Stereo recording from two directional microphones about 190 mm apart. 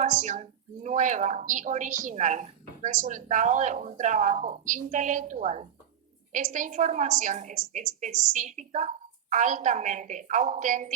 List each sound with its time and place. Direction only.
0.0 s speech: 40° right (ahead or behind)